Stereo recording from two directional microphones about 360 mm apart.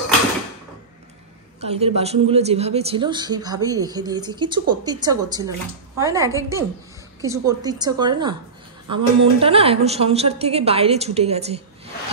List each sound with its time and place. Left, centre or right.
1.6 s a woman's voice: centre